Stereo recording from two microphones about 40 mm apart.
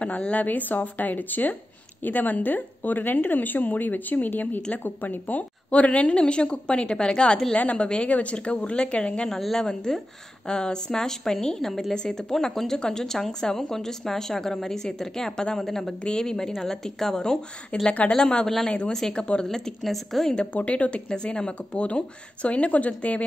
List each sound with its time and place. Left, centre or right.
0.3 s speech: left
5.7 s a woman's voice: left
9.3 s a woman's voice: centre
9.7 s a woman's voice: centre
17.7 s a woman's voice: left; by 20.3 s centre
20.5 s speech: left